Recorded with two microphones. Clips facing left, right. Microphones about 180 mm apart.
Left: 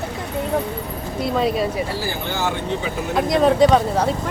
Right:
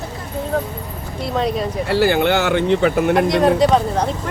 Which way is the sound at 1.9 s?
70° right (ahead or behind).